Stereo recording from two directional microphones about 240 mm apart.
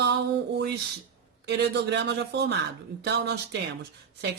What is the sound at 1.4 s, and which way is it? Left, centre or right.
Speech, right.